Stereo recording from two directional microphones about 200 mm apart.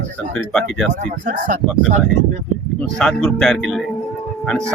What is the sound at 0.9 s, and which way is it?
Speech, 40° right (ahead or behind).